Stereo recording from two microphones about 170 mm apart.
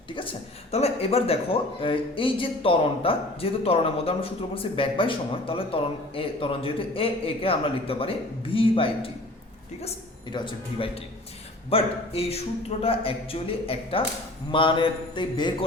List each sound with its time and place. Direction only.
0.7 s a man's voice: 40° left (ahead or behind)
10.2 s a man's voice: 25° left (ahead or behind)